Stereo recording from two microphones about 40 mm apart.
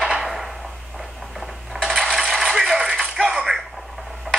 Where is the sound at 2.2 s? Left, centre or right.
Centre.